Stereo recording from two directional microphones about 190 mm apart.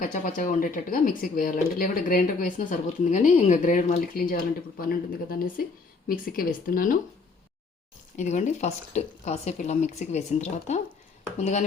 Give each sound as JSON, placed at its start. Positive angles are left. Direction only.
{"t": 0.0, "sound": "speech", "side_deg": 45}
{"t": 8.1, "sound": "speech", "side_deg": 40}